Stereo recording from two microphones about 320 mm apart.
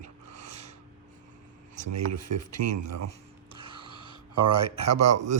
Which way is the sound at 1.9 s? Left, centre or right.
Right.